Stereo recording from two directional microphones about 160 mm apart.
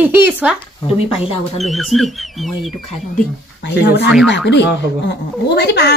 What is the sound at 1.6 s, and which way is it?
Speech, centre (ahead or behind).